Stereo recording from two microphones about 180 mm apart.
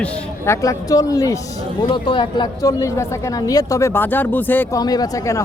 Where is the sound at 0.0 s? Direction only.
15° left (ahead or behind).